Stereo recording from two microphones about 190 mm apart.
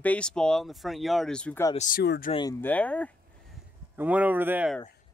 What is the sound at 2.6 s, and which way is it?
Speech, 5° left (ahead or behind).